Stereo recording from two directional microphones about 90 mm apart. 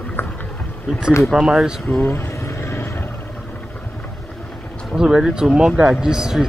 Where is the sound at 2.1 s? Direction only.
30° left (ahead or behind).